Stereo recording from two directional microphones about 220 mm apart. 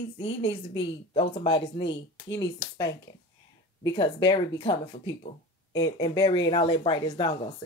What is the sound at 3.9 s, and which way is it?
Speech, 20° left (ahead or behind).